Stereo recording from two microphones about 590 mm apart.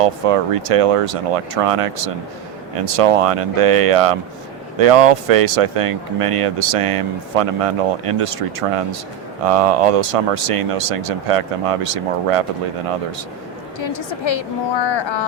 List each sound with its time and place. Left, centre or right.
0.0 s speech: right
13.7 s a woman's voice: left